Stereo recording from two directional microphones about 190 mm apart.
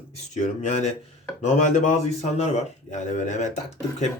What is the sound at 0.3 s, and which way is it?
Speech, 40° left (ahead or behind).